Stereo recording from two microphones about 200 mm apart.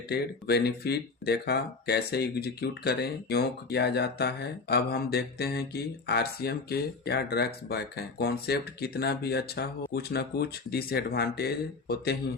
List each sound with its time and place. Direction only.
0.1 s speech: 55° left (ahead or behind)